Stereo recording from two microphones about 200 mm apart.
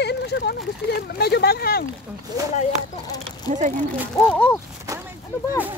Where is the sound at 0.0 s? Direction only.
55° left (ahead or behind).